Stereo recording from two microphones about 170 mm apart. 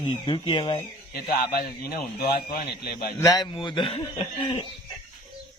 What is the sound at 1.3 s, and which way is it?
Speech, 60° left (ahead or behind).